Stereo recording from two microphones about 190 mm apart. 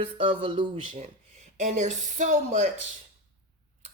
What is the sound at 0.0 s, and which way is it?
A woman's voice, 30° right (ahead or behind).